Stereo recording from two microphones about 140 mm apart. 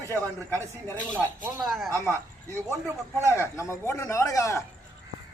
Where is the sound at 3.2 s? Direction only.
20° right (ahead or behind).